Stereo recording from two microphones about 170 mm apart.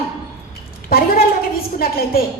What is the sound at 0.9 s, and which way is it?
A woman's voice, 60° left (ahead or behind).